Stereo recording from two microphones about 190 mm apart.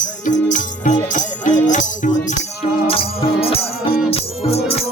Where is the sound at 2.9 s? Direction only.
30° left (ahead or behind).